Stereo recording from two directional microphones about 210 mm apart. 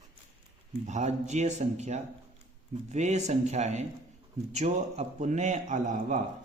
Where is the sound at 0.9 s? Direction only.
35° right (ahead or behind).